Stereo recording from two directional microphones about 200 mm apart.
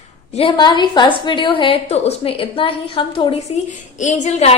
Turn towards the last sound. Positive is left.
turn(degrees=35)  # may be behind; listen again after turning